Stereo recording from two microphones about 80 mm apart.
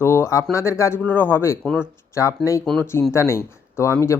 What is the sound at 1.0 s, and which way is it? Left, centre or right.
Speech, left.